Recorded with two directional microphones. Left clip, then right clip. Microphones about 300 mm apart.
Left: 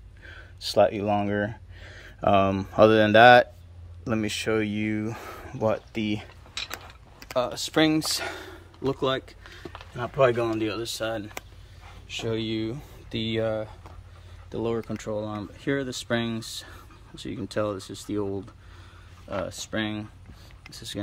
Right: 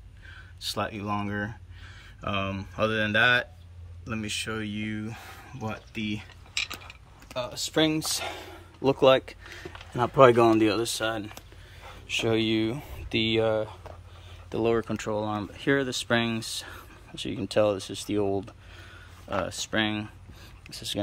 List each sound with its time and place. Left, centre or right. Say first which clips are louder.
0.3 s a sound: left 3 dB; centre
1.9 s speech: left 11 dB; centre
7.3 s speech: left 3 dB; centre
9.9 s speech: right 4 dB; centre